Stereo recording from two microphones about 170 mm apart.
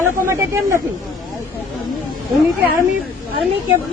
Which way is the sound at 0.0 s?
15° right (ahead or behind).